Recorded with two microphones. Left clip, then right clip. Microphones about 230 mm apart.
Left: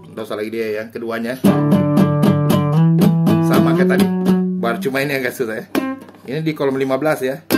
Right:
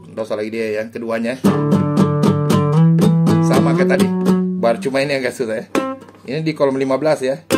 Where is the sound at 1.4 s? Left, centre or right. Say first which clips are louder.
Left 4 dB; left.